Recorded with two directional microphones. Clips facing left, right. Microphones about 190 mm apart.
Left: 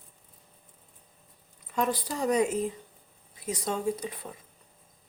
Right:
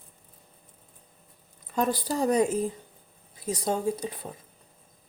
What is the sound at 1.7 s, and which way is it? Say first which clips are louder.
Speech: right 3 dB; 35° right (ahead or behind).